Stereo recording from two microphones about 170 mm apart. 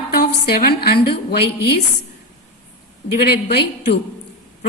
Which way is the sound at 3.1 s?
70° left (ahead or behind).